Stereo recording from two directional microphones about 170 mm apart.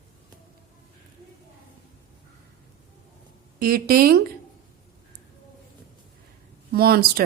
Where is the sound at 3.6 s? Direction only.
60° right (ahead or behind).